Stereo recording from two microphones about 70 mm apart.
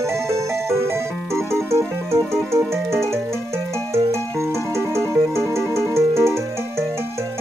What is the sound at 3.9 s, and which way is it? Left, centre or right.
Music, right.